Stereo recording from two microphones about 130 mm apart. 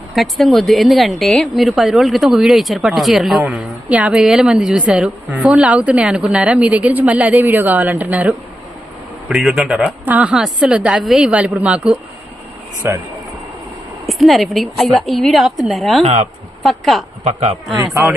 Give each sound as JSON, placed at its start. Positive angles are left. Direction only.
{"t": 0.1, "sound": "speech", "side_deg": 0}
{"t": 9.3, "sound": "speech", "side_deg": 0}
{"t": 12.8, "sound": "speech", "side_deg": -20}
{"t": 14.1, "sound": "a woman's voice", "side_deg": 0}
{"t": 17.2, "sound": "speech", "side_deg": -55}